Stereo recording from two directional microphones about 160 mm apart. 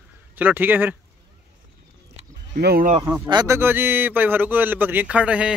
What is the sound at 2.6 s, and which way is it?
Speech, 80° right.